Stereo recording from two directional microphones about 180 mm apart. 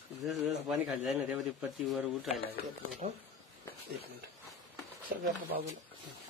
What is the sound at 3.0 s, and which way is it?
Speech, 40° right (ahead or behind).